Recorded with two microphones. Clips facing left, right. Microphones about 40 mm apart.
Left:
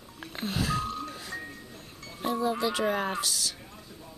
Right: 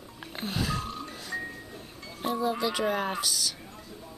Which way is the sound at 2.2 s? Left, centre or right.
Centre.